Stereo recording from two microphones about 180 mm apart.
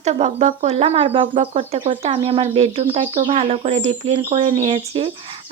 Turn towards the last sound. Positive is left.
turn(degrees=-30)  # may be behind; listen again after turning